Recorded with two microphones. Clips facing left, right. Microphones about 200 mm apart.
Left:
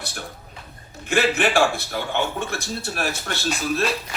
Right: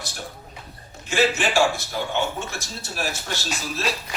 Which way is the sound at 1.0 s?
60° left (ahead or behind).